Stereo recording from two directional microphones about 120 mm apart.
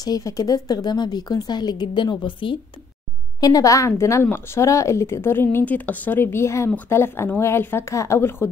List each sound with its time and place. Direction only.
0.0 s speech: 30° left (ahead or behind)
3.3 s speech: 30° left (ahead or behind)